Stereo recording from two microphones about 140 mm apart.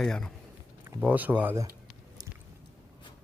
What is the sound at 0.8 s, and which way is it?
Speech, 10° right (ahead or behind).